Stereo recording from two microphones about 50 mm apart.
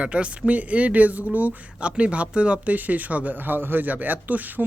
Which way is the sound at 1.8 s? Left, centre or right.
Right.